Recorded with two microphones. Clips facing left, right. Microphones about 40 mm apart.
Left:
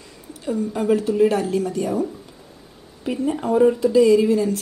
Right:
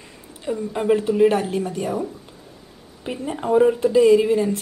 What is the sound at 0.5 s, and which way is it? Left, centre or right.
A woman's voice, right.